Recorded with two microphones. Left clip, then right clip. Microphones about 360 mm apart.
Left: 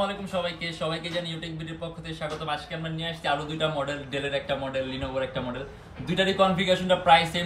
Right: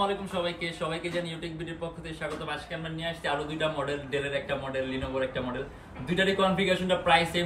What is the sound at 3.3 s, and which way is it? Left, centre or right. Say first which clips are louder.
A man's voice: left 3 dB; centre.